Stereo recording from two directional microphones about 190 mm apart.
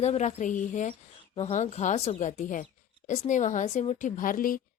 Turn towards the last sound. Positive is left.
turn(degrees=45)  # may be behind; listen again after turning